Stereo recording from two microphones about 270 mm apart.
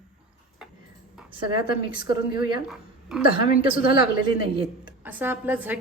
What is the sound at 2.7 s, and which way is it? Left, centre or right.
Speech, centre.